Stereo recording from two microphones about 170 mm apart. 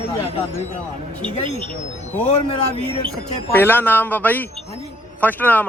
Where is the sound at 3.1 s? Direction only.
10° left (ahead or behind).